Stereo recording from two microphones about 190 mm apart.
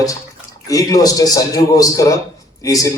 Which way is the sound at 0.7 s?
20° left (ahead or behind).